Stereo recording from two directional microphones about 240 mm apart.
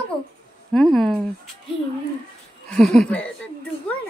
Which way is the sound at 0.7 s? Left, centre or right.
Centre.